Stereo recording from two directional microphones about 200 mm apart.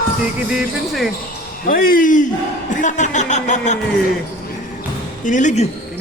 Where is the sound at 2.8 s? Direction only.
35° left (ahead or behind).